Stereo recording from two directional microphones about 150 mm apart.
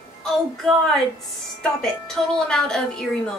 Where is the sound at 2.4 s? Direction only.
5° left (ahead or behind).